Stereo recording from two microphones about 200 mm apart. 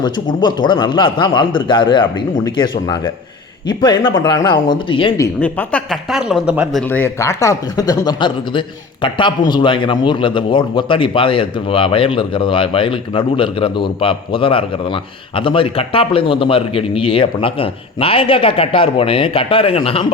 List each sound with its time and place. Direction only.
0.4 s speech: 20° left (ahead or behind)
5.2 s speech: 10° left (ahead or behind)
6.8 s a man's voice: 10° left (ahead or behind); by 20.1 s 30° left (ahead or behind)